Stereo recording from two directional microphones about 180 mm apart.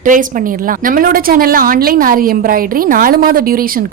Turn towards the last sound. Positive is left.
turn(degrees=-55)  # may be behind; listen again after turning